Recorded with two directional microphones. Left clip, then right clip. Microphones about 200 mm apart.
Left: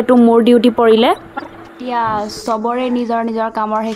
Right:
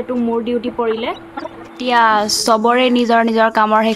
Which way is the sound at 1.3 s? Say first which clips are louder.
Even; centre (ahead or behind).